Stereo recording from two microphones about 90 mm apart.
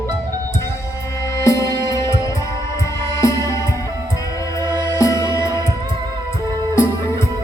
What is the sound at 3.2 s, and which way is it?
Music, 35° left (ahead or behind).